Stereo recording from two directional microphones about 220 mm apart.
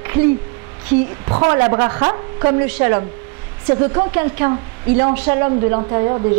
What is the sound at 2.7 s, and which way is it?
Speech, 10° right (ahead or behind).